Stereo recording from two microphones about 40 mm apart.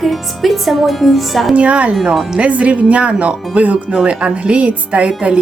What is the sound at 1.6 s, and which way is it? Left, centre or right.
Speech, right.